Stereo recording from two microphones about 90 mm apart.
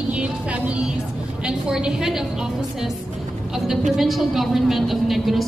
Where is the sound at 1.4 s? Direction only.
10° right (ahead or behind).